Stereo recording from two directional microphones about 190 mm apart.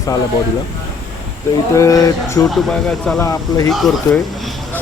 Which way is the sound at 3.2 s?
20° left (ahead or behind).